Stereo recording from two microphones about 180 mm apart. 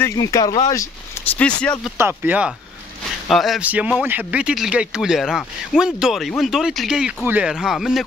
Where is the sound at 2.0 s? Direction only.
10° right (ahead or behind).